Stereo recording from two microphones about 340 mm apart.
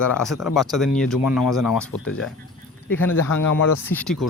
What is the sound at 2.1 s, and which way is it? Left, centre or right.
Speech, left.